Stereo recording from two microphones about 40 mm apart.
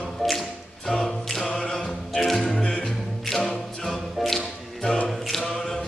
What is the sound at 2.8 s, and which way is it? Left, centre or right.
A capella, centre.